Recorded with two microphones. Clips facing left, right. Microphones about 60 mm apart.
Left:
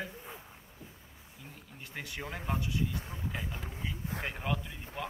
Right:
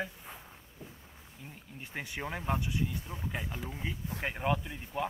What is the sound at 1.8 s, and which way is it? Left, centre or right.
Speech, centre.